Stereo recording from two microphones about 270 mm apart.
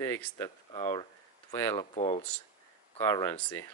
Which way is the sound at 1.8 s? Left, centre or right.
Left.